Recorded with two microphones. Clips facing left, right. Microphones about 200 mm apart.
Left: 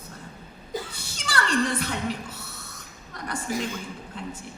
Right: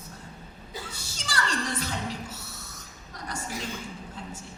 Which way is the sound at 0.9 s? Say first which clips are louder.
Even; 60° left (ahead or behind).